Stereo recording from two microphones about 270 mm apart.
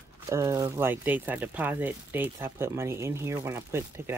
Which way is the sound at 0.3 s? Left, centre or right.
Centre.